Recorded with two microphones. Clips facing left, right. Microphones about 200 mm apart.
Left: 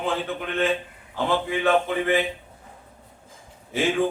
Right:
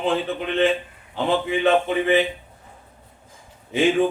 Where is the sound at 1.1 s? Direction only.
20° right (ahead or behind).